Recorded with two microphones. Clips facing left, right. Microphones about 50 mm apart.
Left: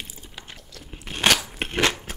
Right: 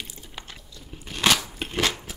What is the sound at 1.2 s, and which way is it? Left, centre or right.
Biting, left.